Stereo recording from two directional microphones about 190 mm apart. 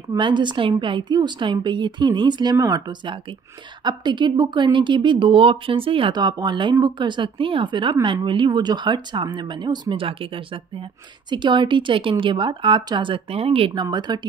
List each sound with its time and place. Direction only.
0.1 s speech: 25° right (ahead or behind)